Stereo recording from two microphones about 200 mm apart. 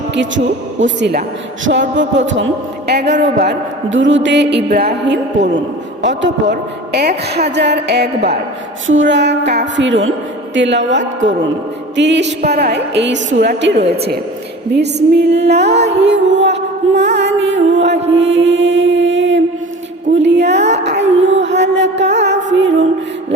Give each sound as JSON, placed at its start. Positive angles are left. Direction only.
{"t": 0.1, "sound": "music", "side_deg": -65}
{"t": 8.9, "sound": "music", "side_deg": -70}
{"t": 13.8, "sound": "a woman's voice", "side_deg": -30}
{"t": 14.7, "sound": "music", "side_deg": -60}
{"t": 18.1, "sound": "mantra", "side_deg": -60}
{"t": 20.1, "sound": "music", "side_deg": -60}